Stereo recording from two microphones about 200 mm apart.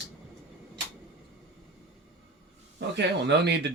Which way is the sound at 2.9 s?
60° right (ahead or behind).